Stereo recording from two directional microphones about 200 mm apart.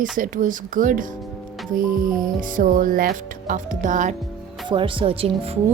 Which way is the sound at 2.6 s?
45° right (ahead or behind).